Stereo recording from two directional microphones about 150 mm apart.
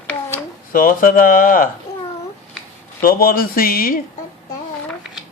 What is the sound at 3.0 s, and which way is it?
Speech, 75° left (ahead or behind).